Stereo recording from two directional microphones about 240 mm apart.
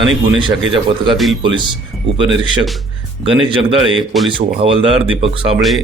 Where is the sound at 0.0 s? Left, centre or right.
Centre.